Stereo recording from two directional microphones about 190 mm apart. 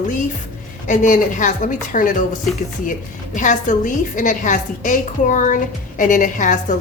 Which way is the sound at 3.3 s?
40° left (ahead or behind).